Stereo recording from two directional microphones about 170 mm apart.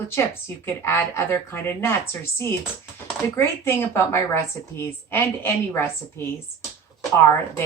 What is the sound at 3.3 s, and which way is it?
A woman's voice, 15° left (ahead or behind).